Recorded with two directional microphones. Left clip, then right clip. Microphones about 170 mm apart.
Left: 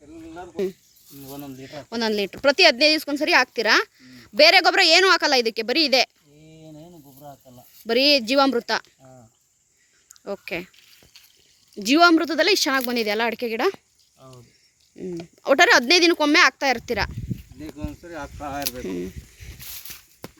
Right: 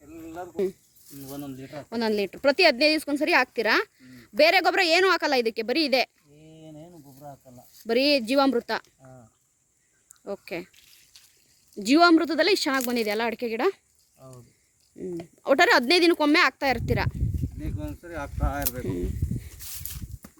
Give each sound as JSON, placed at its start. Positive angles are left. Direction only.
{"t": 0.5, "sound": "speech", "side_deg": -10}
{"t": 6.5, "sound": "a sound", "side_deg": 15}
{"t": 6.8, "sound": "snake", "side_deg": 15}
{"t": 7.9, "sound": "speech", "side_deg": 0}
{"t": 10.2, "sound": "speech", "side_deg": 0}
{"t": 11.7, "sound": "speech", "side_deg": -5}